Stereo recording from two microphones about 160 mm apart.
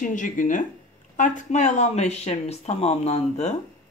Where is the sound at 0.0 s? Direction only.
55° left (ahead or behind).